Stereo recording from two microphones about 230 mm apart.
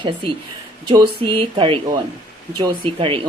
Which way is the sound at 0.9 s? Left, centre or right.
Right.